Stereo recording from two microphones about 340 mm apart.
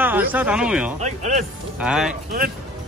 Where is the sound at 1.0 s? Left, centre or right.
Right.